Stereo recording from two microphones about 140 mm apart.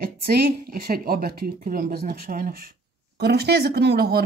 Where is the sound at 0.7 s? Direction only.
90° right.